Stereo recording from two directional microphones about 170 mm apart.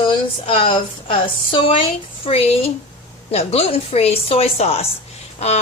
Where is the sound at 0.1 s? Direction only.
30° left (ahead or behind).